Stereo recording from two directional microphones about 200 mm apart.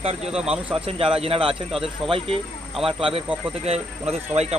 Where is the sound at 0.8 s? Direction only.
30° right (ahead or behind).